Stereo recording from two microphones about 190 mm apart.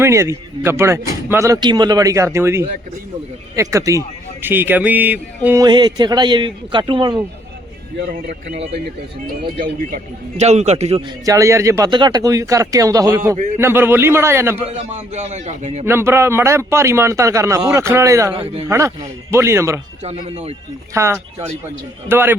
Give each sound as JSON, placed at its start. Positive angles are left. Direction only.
{"t": 0.0, "sound": "speech", "side_deg": -15}
{"t": 5.6, "sound": "speech", "side_deg": -20}
{"t": 7.9, "sound": "a man's voice", "side_deg": -55}
{"t": 9.9, "sound": "a man's voice", "side_deg": -35}
{"t": 11.3, "sound": "speech", "side_deg": -15}
{"t": 14.7, "sound": "a man's voice", "side_deg": -35}
{"t": 15.9, "sound": "speech", "side_deg": -15}
{"t": 20.0, "sound": "a man's voice", "side_deg": -35}
{"t": 20.9, "sound": "speech", "side_deg": -15}